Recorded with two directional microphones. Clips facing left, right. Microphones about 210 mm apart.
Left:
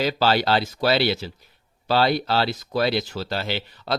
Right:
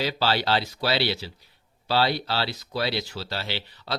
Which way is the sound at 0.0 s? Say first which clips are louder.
Left 4 dB; 50° left (ahead or behind).